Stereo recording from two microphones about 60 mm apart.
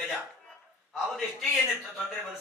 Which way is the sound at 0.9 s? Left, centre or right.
Centre.